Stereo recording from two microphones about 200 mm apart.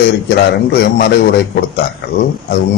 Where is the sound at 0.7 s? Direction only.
55° left (ahead or behind).